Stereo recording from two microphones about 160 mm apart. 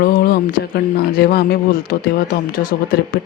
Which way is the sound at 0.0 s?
70° left (ahead or behind).